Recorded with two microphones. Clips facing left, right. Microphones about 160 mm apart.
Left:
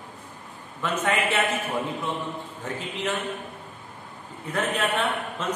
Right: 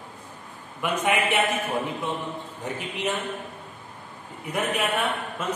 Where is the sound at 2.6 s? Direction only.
15° right (ahead or behind).